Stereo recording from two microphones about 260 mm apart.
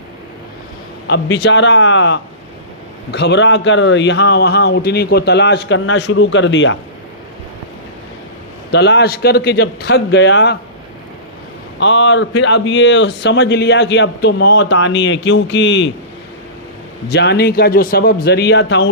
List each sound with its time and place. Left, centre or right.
1.0 s speech: left
8.7 s a man's voice: left
11.8 s speech: left
17.1 s a man's voice: left